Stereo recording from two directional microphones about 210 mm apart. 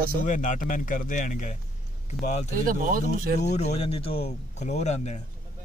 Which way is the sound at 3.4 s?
30° left (ahead or behind).